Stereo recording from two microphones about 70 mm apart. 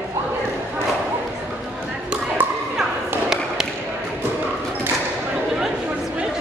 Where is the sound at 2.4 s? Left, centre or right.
Right.